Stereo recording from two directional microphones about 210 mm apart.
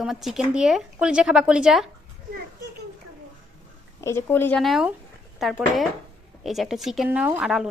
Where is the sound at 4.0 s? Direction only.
10° left (ahead or behind).